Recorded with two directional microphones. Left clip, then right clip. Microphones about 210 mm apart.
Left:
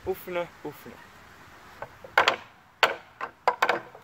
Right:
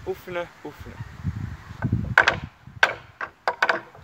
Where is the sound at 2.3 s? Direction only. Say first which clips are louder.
Right 3 dB; 15° left (ahead or behind).